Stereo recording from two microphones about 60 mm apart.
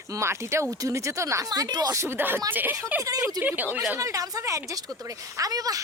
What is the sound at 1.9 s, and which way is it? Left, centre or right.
Speech, right.